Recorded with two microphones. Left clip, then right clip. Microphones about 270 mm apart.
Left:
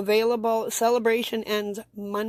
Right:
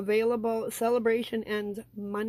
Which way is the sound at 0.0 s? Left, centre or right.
Left.